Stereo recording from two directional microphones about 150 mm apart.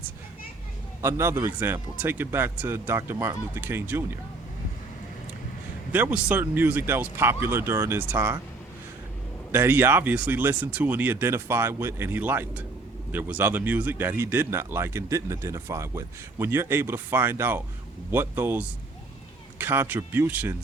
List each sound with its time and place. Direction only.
1.0 s speech: 15° right (ahead or behind)
5.9 s speech: 10° right (ahead or behind)
9.5 s speech: 15° right (ahead or behind)